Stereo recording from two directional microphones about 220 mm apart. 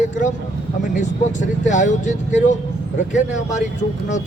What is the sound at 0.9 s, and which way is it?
A man's voice, 35° left (ahead or behind).